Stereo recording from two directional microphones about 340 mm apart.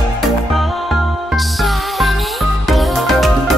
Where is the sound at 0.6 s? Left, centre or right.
Centre.